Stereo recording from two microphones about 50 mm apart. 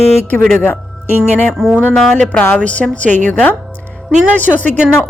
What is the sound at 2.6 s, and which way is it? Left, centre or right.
A woman's voice, left.